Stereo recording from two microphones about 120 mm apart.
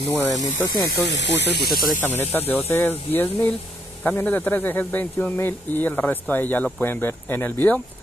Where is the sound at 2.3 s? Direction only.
15° left (ahead or behind).